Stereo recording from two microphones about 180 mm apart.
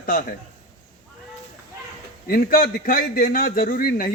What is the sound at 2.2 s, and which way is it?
A man's voice, 55° left (ahead or behind).